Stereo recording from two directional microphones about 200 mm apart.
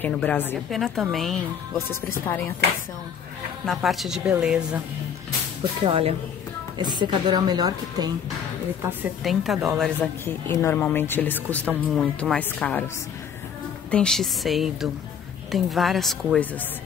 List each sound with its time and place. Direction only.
0.0 s a woman's voice: 10° left (ahead or behind)
3.6 s a woman's voice: centre (ahead or behind)
5.6 s speech: 25° right (ahead or behind)
9.2 s a woman's voice: centre (ahead or behind)
10.2 s speech: 10° left (ahead or behind)
11.7 s a woman's voice: 5° right (ahead or behind)